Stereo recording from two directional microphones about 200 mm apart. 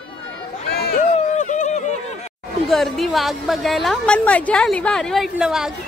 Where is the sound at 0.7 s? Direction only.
55° left (ahead or behind).